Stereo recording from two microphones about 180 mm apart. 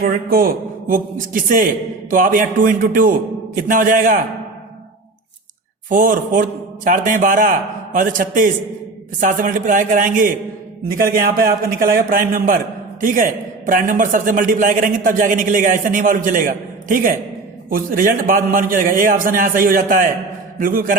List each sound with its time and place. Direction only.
0.0 s a man's voice: 55° right (ahead or behind)
5.9 s a man's voice: 50° right (ahead or behind)